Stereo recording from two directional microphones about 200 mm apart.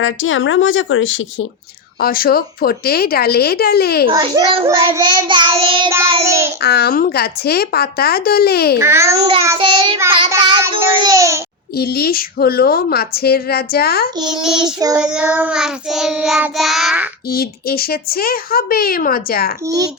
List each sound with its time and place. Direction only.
0.0 s speech: 75° left (ahead or behind)
2.0 s speech: 50° left (ahead or behind)
4.1 s child singing: 25° right (ahead or behind)
6.2 s a child's voice: 15° right (ahead or behind)
6.6 s speech: 55° left (ahead or behind)
8.8 s a child's voice: 15° right (ahead or behind)
9.1 s child singing: 30° right (ahead or behind)
10.7 s a child's voice: 20° right (ahead or behind)
11.8 s speech: 50° left (ahead or behind)
14.6 s a child's voice: 20° right (ahead or behind)
15.0 s child singing: 5° right (ahead or behind)
17.2 s speech: 50° left (ahead or behind)
19.6 s a child's voice: 20° right (ahead or behind)